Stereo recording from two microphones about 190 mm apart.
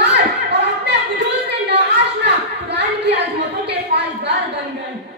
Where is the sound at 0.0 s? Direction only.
65° right (ahead or behind).